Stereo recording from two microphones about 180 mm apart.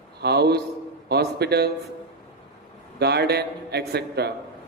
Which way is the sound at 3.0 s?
65° right (ahead or behind).